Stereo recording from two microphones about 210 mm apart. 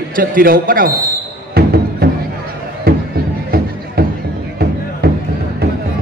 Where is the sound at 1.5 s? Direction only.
50° right (ahead or behind).